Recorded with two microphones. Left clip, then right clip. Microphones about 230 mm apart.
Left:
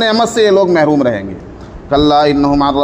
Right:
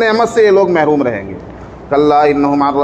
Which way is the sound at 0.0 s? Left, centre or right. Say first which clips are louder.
Right 1 dB; left.